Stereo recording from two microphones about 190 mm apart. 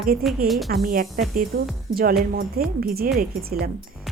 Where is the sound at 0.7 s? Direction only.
50° right (ahead or behind).